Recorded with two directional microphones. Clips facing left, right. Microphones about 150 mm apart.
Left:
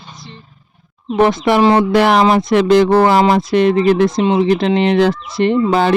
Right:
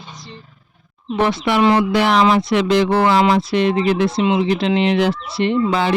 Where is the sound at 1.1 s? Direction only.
40° left (ahead or behind).